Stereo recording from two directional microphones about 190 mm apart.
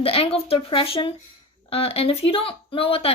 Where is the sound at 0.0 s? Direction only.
30° left (ahead or behind).